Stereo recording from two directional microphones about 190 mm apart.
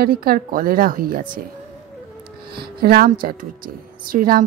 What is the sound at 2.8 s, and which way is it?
A woman's voice, 50° right (ahead or behind).